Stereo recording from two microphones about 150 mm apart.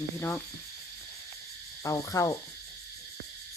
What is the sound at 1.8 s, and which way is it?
Cricket, 20° left (ahead or behind).